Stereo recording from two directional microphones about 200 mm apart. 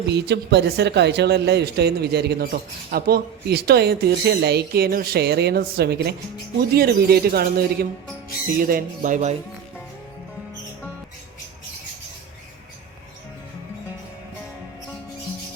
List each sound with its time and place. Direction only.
0.1 s speech: 60° right (ahead or behind); by 9.3 s 40° right (ahead or behind)